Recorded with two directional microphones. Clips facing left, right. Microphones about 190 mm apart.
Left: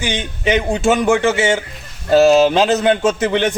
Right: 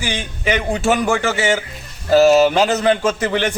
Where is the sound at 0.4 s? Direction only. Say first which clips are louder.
Left 2 dB; 20° left (ahead or behind).